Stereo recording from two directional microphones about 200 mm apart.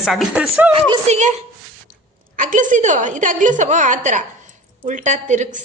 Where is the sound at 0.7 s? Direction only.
30° right (ahead or behind).